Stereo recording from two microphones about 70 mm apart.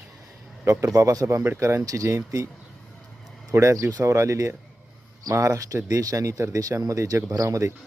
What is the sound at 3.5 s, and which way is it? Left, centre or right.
Speech, right.